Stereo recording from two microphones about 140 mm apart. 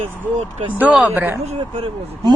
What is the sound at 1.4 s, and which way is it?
Speech, 45° right (ahead or behind).